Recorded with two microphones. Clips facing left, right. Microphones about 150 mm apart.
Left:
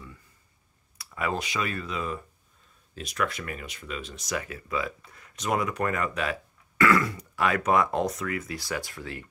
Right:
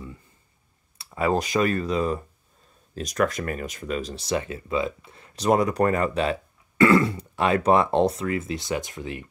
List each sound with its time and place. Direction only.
0.9 s speech: 30° right (ahead or behind)